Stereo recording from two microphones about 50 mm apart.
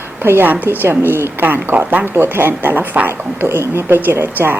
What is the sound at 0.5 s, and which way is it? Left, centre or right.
Speech, right.